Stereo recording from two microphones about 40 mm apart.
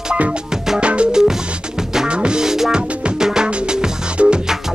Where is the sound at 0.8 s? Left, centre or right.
Right.